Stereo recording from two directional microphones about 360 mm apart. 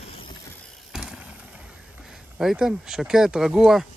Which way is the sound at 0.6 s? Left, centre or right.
Centre.